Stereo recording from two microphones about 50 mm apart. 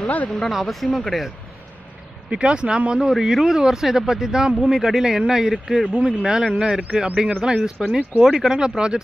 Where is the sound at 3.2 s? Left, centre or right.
Centre.